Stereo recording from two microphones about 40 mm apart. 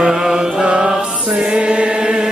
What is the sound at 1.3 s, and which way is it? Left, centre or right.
Chant, right.